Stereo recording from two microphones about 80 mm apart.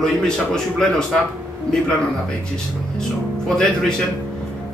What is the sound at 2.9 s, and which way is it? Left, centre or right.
Speech, centre.